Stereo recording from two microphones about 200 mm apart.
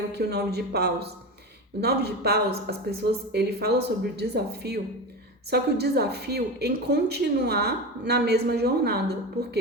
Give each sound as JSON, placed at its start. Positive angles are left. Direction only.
{"t": 0.1, "sound": "a woman's voice", "side_deg": -55}